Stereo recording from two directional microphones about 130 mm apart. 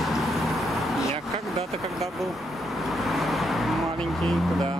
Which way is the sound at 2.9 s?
Centre (ahead or behind).